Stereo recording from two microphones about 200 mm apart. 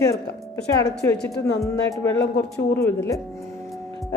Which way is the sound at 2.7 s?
10° left (ahead or behind).